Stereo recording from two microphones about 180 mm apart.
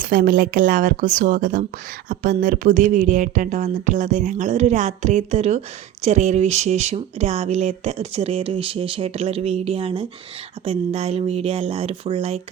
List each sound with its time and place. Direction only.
0.0 s a woman's voice: 50° right (ahead or behind); by 12.4 s 35° right (ahead or behind)